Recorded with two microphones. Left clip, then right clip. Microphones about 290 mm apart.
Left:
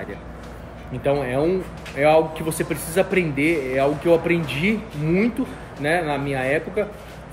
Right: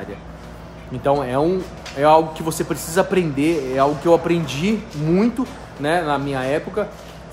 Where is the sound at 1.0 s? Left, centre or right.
Centre.